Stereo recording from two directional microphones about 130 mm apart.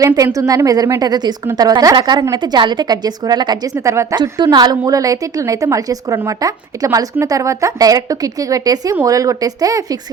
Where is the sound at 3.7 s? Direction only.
20° right (ahead or behind).